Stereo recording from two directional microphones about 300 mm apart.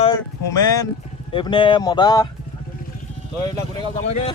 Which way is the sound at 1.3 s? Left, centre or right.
Centre.